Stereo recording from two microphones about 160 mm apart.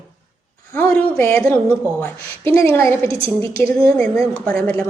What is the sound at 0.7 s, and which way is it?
A woman's voice, 10° left (ahead or behind).